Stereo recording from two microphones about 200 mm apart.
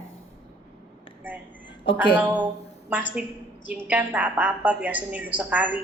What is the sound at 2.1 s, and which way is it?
A woman's voice, 5° right (ahead or behind).